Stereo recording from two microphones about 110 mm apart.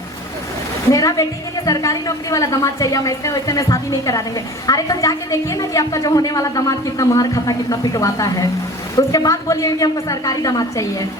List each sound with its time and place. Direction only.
0.9 s a woman's voice: 30° left (ahead or behind)